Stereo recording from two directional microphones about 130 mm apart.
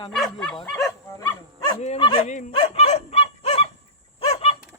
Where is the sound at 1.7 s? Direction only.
60° left (ahead or behind).